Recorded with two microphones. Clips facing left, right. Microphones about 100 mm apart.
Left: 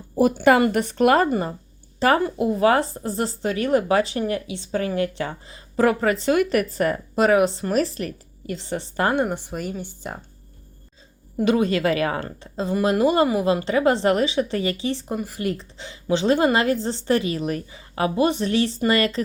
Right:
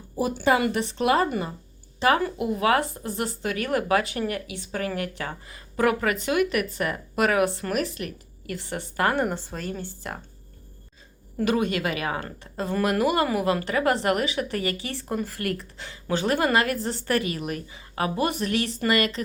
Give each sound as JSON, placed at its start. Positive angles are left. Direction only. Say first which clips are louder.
{"t": 0.2, "sound": "speech", "louder": "left 6 dB", "side_deg": 60}
{"t": 1.3, "sound": "speech", "louder": "left 5 dB", "side_deg": 40}
{"t": 9.2, "sound": "speech", "louder": "left 2 dB", "side_deg": 15}
{"t": 11.6, "sound": "speech", "louder": "left 6 dB", "side_deg": 35}
{"t": 12.5, "sound": "speech", "louder": "left 3 dB", "side_deg": 20}